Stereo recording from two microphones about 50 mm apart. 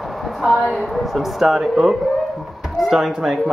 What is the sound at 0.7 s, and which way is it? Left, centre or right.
Speech, centre.